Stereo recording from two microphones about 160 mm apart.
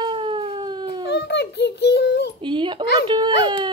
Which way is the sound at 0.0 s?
30° right (ahead or behind).